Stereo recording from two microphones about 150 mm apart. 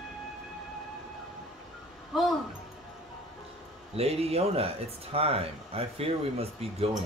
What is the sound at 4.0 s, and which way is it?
Speech, 40° right (ahead or behind).